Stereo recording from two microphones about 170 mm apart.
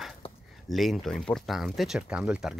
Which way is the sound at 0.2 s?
35° left (ahead or behind).